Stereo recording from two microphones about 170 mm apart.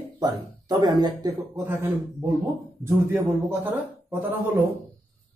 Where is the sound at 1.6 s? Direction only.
15° right (ahead or behind).